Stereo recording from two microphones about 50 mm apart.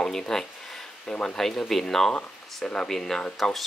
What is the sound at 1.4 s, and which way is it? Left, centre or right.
Speech, centre.